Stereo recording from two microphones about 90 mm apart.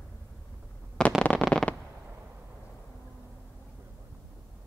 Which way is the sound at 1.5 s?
10° left (ahead or behind).